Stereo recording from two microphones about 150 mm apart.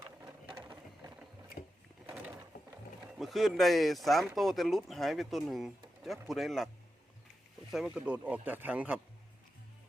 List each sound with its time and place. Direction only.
0.5 s a sound: 25° right (ahead or behind)
3.2 s speech: centre (ahead or behind)
7.9 s speech: 10° right (ahead or behind)